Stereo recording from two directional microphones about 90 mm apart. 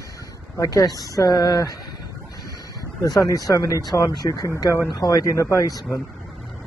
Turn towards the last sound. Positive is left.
turn(degrees=40)  # may be behind; listen again after turning